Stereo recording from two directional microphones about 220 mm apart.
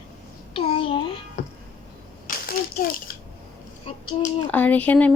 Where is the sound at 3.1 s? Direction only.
40° left (ahead or behind).